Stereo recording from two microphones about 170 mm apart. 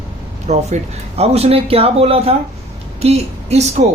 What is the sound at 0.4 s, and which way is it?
Speech, 40° right (ahead or behind).